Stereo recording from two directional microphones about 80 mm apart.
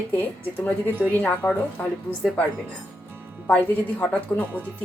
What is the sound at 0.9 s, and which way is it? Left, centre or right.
Speech, right.